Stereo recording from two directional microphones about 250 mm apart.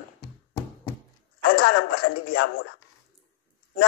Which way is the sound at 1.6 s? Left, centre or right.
Left.